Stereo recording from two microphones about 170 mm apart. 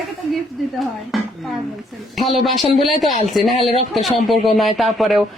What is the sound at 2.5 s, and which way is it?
Speech, 45° left (ahead or behind).